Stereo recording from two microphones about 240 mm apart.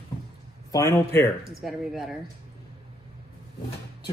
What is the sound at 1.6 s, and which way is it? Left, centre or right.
Music, centre.